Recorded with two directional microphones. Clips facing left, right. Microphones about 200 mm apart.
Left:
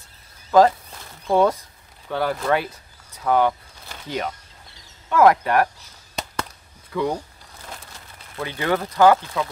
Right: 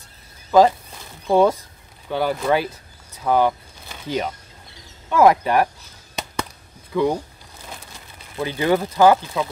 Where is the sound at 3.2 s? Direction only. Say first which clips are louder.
Right 1 dB; 10° right (ahead or behind).